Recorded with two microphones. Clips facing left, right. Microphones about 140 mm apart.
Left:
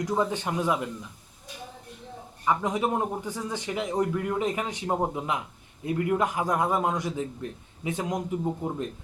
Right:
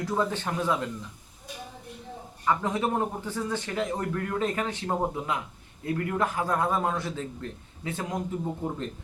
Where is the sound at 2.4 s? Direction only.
15° left (ahead or behind).